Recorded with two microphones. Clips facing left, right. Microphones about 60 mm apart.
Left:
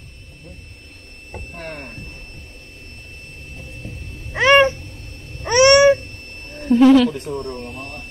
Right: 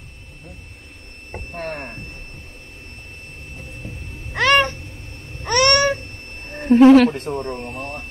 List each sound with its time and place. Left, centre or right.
1.6 s speech: right
3.8 s cat: right
4.4 s cat: centre
6.5 s a sound: right
7.0 s speech: right
7.3 s speech: right
7.8 s vehicle: right